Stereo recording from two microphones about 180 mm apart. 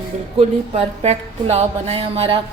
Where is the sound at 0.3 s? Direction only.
35° right (ahead or behind).